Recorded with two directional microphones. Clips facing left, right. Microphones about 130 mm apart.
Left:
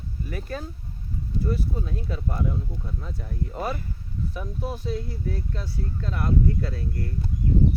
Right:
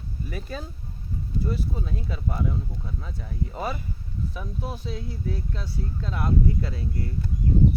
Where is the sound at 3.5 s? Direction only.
10° right (ahead or behind).